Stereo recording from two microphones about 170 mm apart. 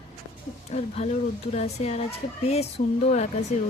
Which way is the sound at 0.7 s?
40° left (ahead or behind).